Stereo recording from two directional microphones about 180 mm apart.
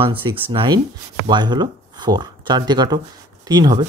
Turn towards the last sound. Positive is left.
turn(degrees=-25)  # may be behind; listen again after turning